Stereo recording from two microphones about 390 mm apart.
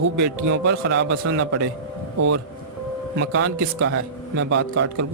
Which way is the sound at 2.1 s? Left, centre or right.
Right.